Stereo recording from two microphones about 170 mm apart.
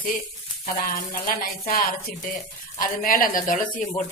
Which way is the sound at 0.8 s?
60° left (ahead or behind).